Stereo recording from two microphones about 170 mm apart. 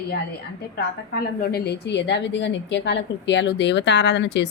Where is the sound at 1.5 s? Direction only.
70° left (ahead or behind).